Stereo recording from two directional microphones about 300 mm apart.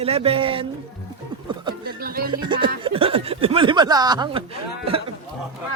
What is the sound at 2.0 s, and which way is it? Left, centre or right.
Speech, right.